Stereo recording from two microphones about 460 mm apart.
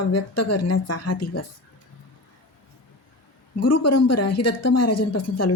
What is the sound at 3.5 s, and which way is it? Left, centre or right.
Speech, left.